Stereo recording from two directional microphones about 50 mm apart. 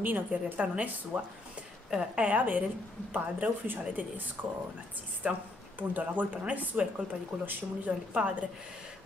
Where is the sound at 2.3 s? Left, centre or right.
Right.